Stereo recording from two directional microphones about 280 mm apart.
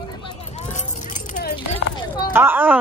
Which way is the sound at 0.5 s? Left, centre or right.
Left.